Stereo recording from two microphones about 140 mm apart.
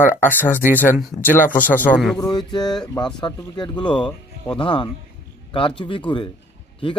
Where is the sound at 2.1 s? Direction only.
30° left (ahead or behind).